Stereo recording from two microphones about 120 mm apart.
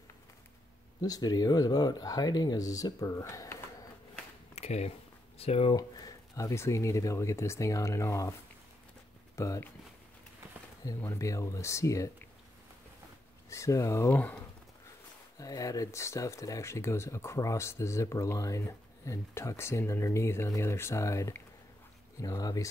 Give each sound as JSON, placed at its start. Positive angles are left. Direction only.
{"t": 1.0, "sound": "speech", "side_deg": 35}
{"t": 4.6, "sound": "a sound", "side_deg": 60}
{"t": 5.4, "sound": "speech", "side_deg": 55}
{"t": 5.8, "sound": "speech", "side_deg": 30}
{"t": 10.8, "sound": "speech", "side_deg": 25}
{"t": 13.5, "sound": "speech", "side_deg": 25}
{"t": 14.1, "sound": "speech", "side_deg": 15}
{"t": 15.3, "sound": "speech", "side_deg": 30}